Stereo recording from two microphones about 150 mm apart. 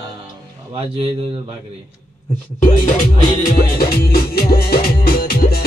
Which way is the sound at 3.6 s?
85° left.